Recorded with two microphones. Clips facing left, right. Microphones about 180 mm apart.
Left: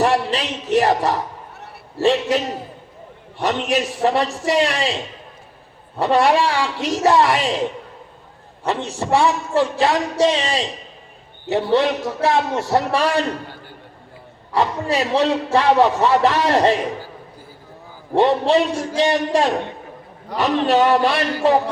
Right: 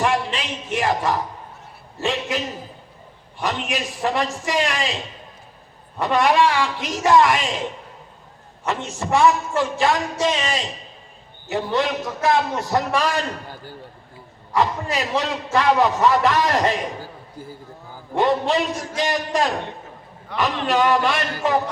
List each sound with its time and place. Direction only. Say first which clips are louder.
0.0 s a sound: left 4 dB; 35° left (ahead or behind)
1.5 s a sound: left 5 dB; 70° left (ahead or behind)
2.0 s a man's voice: left 7 dB; 35° left (ahead or behind)
6.0 s a man's voice: left 2 dB; 35° left (ahead or behind)
8.6 s a man's voice: left 3 dB; 35° left (ahead or behind)
14.5 s a man's voice: left 2 dB; 30° left (ahead or behind)
18.1 s a man's voice: left 4 dB; 30° left (ahead or behind)